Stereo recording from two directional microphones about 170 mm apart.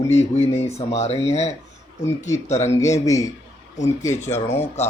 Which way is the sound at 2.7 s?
15° left (ahead or behind).